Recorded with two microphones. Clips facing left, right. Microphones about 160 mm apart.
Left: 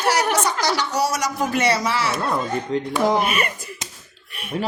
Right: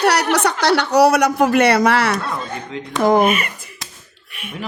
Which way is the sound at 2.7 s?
45° left (ahead or behind).